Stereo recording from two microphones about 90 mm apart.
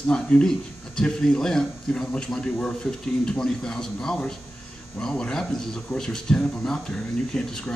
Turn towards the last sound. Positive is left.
turn(degrees=10)  # may be behind; listen again after turning